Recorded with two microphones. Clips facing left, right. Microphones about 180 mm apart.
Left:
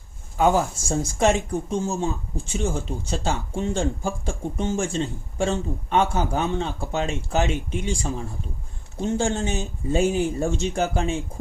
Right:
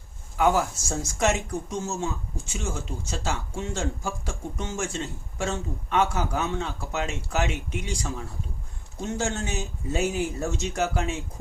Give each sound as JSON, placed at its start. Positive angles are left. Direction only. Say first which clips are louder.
{"t": 0.3, "sound": "speech", "louder": "left 3 dB", "side_deg": 25}
{"t": 9.0, "sound": "speech", "louder": "left 5 dB", "side_deg": 30}